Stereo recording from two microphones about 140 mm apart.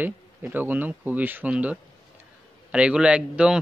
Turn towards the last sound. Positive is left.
turn(degrees=-10)  # may be behind; listen again after turning